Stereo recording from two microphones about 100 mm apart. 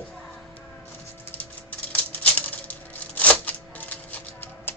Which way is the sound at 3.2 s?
15° left (ahead or behind).